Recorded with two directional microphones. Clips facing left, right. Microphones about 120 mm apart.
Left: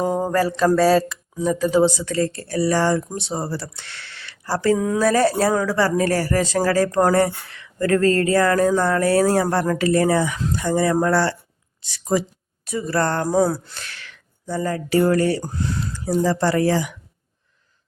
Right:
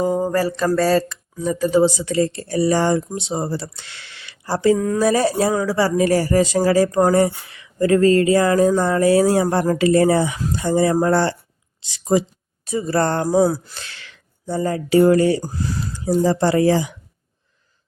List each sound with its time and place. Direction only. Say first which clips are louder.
0.0 s mantra: right 1 dB; centre (ahead or behind)
0.8 s speech: left 1 dB; centre (ahead or behind)
2.0 s speech: right 3 dB; 10° right (ahead or behind)
13.2 s speech: right 2 dB; 10° right (ahead or behind)
13.8 s speech: left 1 dB; 25° right (ahead or behind)
15.4 s speech: even; 5° right (ahead or behind)
16.0 s speech: right 2 dB; 20° right (ahead or behind)